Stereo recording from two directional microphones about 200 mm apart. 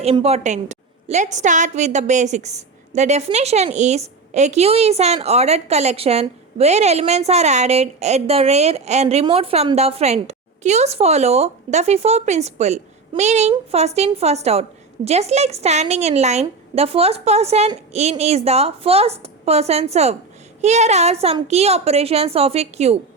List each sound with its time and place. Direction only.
0.0 s a woman's voice: 30° right (ahead or behind)